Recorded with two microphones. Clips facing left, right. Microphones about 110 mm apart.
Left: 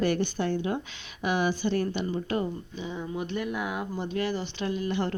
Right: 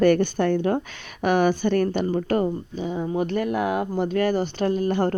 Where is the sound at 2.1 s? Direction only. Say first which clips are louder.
Right 7 dB; 45° right (ahead or behind).